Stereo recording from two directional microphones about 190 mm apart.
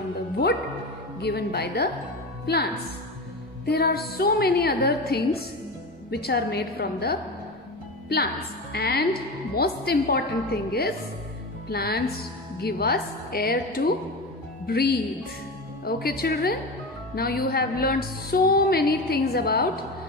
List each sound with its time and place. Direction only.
1.2 s music: 60° left (ahead or behind)
2.4 s speech: 60° left (ahead or behind)
3.6 s music: 55° left (ahead or behind)
8.7 s music: 55° left (ahead or behind)
15.8 s speech: 55° left (ahead or behind)
17.1 s music: 55° left (ahead or behind)